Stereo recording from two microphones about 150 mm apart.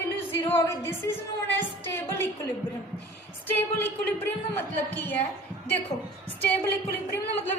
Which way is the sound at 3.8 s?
15° left (ahead or behind).